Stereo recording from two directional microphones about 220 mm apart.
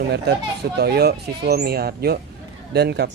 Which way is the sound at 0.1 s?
50° right (ahead or behind).